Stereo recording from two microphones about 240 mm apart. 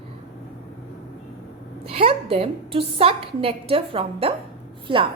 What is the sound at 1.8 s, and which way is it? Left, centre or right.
A woman's voice, right.